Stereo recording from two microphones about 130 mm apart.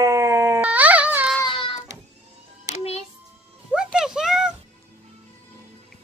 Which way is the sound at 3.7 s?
5° right (ahead or behind).